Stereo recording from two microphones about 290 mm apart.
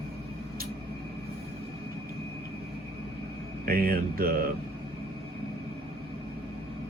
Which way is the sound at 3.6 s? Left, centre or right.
Right.